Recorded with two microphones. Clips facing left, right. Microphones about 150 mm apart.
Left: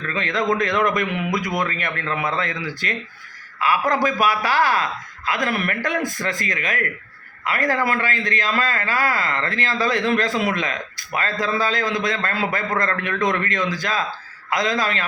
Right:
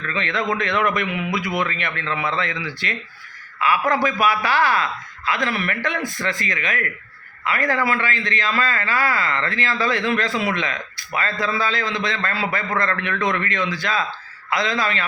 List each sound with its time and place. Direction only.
0.1 s a man's voice: 45° left (ahead or behind)